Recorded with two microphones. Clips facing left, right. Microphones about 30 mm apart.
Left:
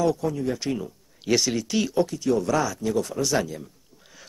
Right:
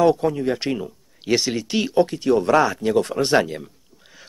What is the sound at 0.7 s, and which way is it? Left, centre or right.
Speech, right.